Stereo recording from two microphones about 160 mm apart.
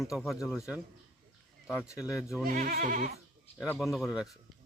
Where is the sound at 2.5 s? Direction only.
60° right (ahead or behind).